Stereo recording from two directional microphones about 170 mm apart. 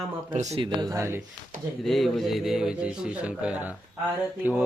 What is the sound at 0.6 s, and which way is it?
Speech, 25° right (ahead or behind).